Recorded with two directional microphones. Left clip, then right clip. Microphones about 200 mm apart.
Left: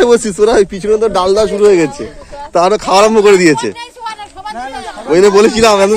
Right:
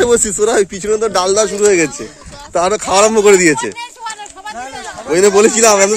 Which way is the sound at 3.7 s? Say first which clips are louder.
Left 2 dB; 25° left (ahead or behind).